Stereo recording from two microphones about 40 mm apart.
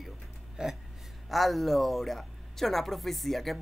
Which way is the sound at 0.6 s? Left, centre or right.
Right.